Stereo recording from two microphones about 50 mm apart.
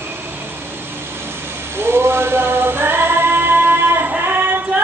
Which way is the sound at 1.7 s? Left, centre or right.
Right.